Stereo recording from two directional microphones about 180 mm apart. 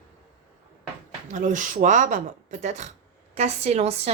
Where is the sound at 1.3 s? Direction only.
45° right (ahead or behind).